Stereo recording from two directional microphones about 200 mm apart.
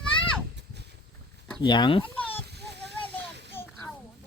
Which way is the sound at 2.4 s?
55° right (ahead or behind).